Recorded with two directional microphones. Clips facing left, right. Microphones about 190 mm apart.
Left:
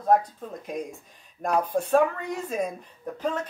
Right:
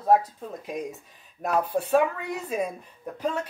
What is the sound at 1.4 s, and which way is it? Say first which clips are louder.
Speech: even; 5° right (ahead or behind).